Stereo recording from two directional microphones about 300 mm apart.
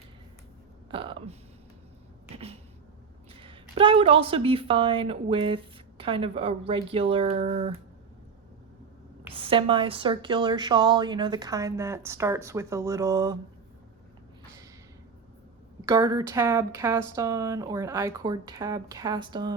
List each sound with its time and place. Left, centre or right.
0.9 s speech: centre
2.3 s a sound: centre
3.3 s a woman's voice: centre
9.3 s speech: centre
15.9 s speech: centre